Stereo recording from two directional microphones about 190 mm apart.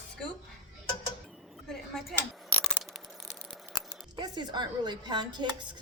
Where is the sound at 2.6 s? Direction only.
Centre (ahead or behind).